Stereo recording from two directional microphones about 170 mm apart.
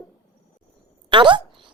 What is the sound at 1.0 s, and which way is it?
Speech, 30° right (ahead or behind).